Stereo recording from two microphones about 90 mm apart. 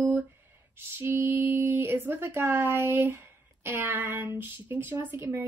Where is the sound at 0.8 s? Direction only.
25° right (ahead or behind).